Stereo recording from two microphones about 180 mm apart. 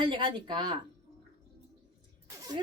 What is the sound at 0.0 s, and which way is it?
Speech, 25° right (ahead or behind).